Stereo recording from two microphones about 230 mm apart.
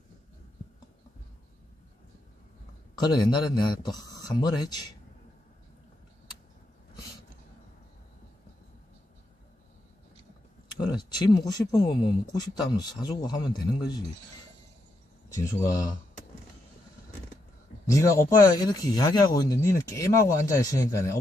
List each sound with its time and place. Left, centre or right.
3.0 s speech: centre
10.8 s speech: centre
15.3 s speech: centre
17.8 s speech: centre